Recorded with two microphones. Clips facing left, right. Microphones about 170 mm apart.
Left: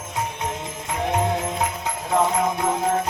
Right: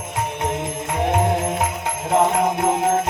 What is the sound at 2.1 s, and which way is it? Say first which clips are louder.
Music: right 3 dB; 20° right (ahead or behind).